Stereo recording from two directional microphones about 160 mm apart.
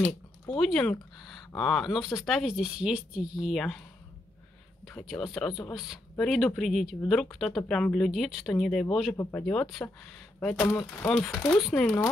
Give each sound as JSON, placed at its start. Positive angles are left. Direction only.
{"t": 0.0, "sound": "speech", "side_deg": 5}
{"t": 4.8, "sound": "speech", "side_deg": 5}
{"t": 9.1, "sound": "speech", "side_deg": 20}
{"t": 9.4, "sound": "speech", "side_deg": 5}